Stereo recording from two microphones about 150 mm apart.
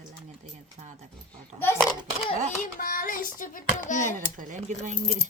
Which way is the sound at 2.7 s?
70° left (ahead or behind).